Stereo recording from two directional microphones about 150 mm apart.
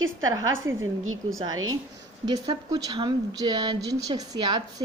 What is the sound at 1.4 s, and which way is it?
Speech, 25° right (ahead or behind).